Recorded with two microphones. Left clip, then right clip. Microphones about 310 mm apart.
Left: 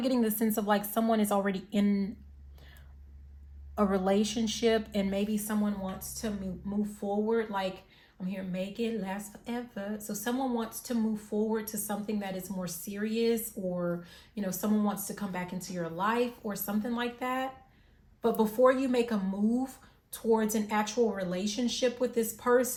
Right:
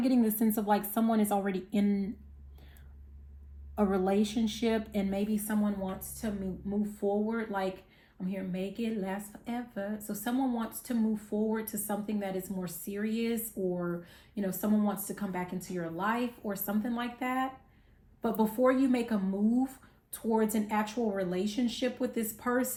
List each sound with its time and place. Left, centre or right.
0.0 s a woman's voice: left
3.8 s a woman's voice: left
7.3 s a woman's voice: centre
20.3 s a woman's voice: centre